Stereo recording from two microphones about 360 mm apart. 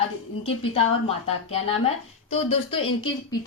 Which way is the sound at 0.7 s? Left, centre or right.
Centre.